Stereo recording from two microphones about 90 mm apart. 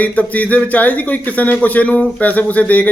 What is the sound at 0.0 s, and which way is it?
Speech, 15° left (ahead or behind).